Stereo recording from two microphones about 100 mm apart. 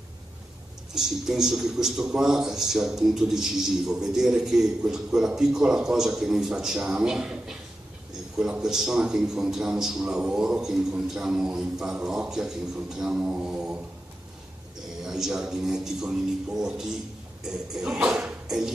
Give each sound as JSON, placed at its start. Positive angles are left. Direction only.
{"t": 0.9, "sound": "a man's voice", "side_deg": -5}
{"t": 15.0, "sound": "a man's voice", "side_deg": -5}